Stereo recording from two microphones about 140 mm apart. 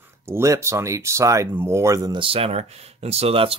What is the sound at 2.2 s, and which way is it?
Speech, 40° right (ahead or behind).